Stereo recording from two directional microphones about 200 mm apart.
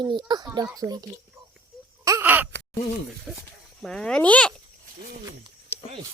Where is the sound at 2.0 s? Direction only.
10° right (ahead or behind).